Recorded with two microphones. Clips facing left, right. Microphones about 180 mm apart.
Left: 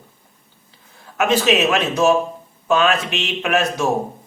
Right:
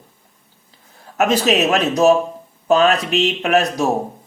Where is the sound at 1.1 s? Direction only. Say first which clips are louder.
Right 1 dB; 40° right (ahead or behind).